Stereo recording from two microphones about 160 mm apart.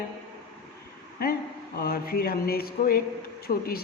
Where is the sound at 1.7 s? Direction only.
70° left (ahead or behind).